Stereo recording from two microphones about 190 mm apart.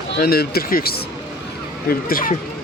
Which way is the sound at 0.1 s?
55° left (ahead or behind).